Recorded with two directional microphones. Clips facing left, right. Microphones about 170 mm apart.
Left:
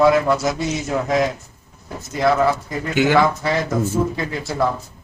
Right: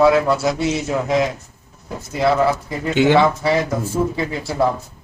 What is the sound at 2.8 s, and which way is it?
Speech, 25° right (ahead or behind).